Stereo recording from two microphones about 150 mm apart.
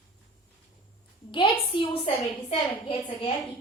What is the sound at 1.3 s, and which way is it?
A woman's voice, 35° left (ahead or behind).